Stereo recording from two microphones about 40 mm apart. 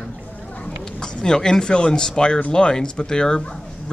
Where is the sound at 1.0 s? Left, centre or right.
Centre.